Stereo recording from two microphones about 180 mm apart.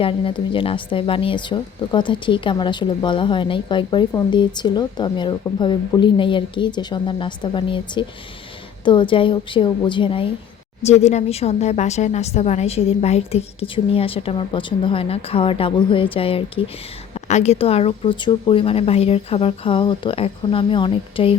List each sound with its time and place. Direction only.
0.0 s speech: 30° left (ahead or behind)
10.8 s a woman's voice: 40° left (ahead or behind)